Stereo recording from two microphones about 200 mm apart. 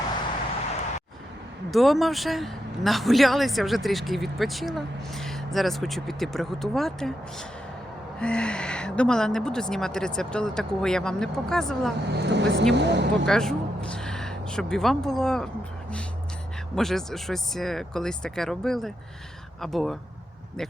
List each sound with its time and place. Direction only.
1.7 s a man's voice: centre (ahead or behind)
8.2 s a man's voice: 5° left (ahead or behind)
12.1 s speech: 60° right (ahead or behind)
13.2 s speech: centre (ahead or behind)
16.7 s a man's voice: centre (ahead or behind)